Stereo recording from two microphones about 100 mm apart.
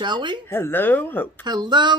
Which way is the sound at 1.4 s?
45° right (ahead or behind).